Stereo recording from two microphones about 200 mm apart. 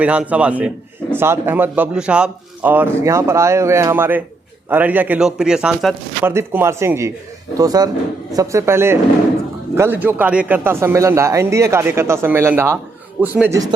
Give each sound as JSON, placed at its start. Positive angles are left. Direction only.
{"t": 0.0, "sound": "a man's voice", "side_deg": -5}